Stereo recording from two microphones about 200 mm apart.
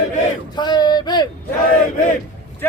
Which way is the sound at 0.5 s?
20° left (ahead or behind).